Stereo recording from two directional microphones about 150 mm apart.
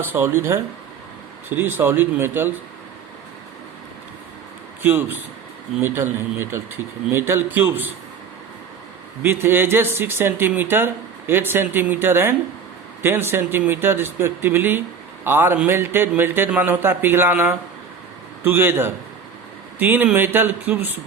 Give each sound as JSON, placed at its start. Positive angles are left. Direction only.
{"t": 0.0, "sound": "speech", "side_deg": -15}
{"t": 4.8, "sound": "speech", "side_deg": -15}
{"t": 9.2, "sound": "speech", "side_deg": -15}